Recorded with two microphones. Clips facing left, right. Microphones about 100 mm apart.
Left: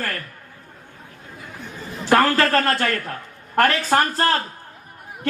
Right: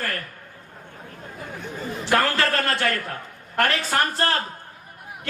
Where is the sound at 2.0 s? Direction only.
40° left (ahead or behind).